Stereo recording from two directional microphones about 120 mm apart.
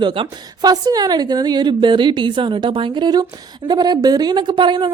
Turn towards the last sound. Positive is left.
turn(degrees=-40)  # may be behind; listen again after turning